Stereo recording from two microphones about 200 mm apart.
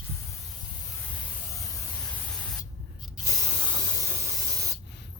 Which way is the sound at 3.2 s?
15° right (ahead or behind).